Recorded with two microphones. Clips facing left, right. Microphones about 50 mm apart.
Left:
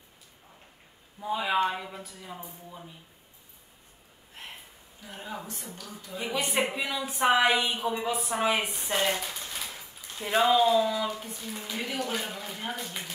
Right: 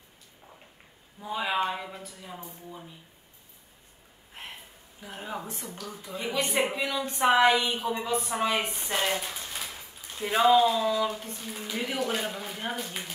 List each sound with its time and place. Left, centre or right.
1.2 s a woman's voice: centre
5.0 s speech: centre
6.1 s a woman's voice: centre